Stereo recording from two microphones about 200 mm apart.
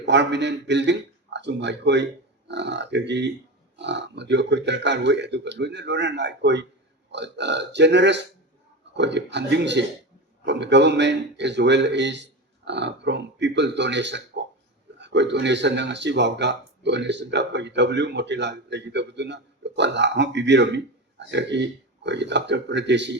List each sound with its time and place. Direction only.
0.0 s speech: 60° right (ahead or behind)